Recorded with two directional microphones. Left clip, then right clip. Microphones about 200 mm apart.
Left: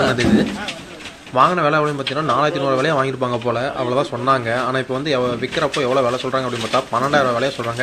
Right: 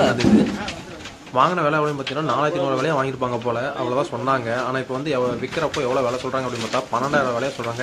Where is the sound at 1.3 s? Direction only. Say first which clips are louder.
Left 3 dB; 10° left (ahead or behind).